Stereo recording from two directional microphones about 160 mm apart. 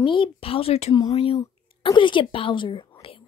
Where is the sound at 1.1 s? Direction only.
35° left (ahead or behind).